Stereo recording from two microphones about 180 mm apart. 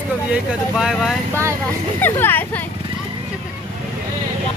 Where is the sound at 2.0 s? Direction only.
10° left (ahead or behind).